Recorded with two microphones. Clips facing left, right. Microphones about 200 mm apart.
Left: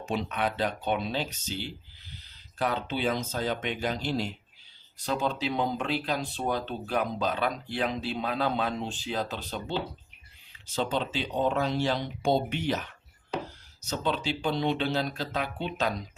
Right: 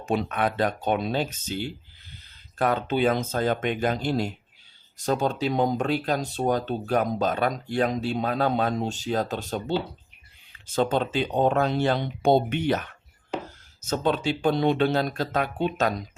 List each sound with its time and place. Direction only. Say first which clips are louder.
0.0 s speech: right 4 dB; 50° right (ahead or behind)